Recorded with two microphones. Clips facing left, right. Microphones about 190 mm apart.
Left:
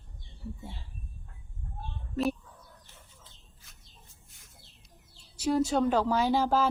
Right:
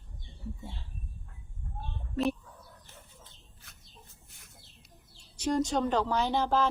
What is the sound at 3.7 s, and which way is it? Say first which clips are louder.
Bird: right 4 dB; 60° right (ahead or behind).